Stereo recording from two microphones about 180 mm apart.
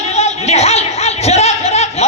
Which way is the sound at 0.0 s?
35° left (ahead or behind).